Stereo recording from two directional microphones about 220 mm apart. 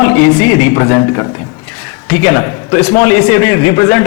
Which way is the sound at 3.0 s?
10° left (ahead or behind).